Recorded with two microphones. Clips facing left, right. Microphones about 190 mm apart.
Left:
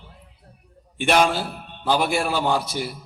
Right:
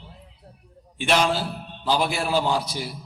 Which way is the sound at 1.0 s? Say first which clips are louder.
Left 2 dB; 50° left (ahead or behind).